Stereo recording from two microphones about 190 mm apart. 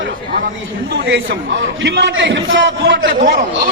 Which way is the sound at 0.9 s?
90° right.